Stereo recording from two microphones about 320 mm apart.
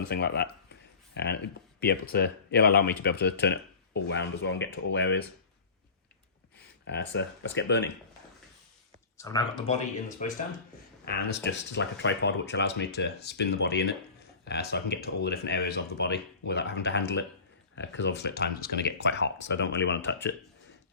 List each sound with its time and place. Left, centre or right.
0.1 s a sound: left
1.8 s speech: left
6.8 s speech: left
9.1 s speech: centre; by 20.1 s left